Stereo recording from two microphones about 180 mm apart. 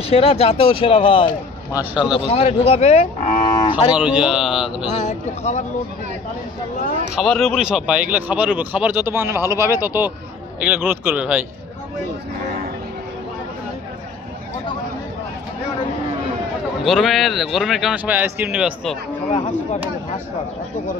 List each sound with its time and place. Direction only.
0.1 s a man's voice: 35° left (ahead or behind)
1.8 s a man's voice: 5° right (ahead or behind)
2.1 s a man's voice: 35° left (ahead or behind)
3.9 s a man's voice: 5° right (ahead or behind)
5.0 s a man's voice: 40° left (ahead or behind)
7.2 s speech: centre (ahead or behind)
16.8 s a man's voice: centre (ahead or behind)